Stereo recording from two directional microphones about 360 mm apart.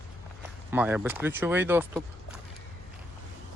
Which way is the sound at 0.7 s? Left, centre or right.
Centre.